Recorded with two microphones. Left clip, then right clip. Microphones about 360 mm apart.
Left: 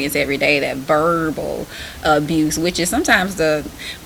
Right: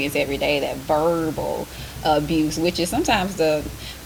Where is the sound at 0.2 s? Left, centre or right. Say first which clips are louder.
Left 6 dB; left.